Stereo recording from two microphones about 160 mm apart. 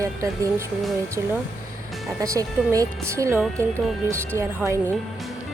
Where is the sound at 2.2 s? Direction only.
20° right (ahead or behind).